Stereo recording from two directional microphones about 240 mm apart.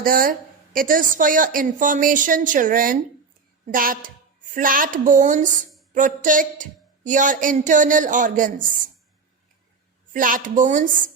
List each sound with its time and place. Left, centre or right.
0.0 s a woman's voice: right
10.1 s a woman's voice: right